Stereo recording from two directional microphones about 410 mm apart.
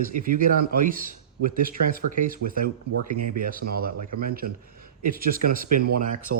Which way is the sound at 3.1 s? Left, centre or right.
Right.